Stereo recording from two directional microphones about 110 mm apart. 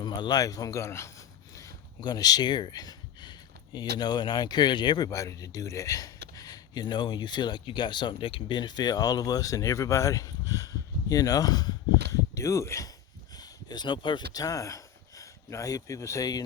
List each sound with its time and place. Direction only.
0.0 s speech: 40° left (ahead or behind)